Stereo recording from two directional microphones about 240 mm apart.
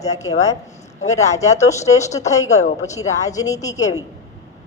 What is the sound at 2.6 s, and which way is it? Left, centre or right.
Speech, left.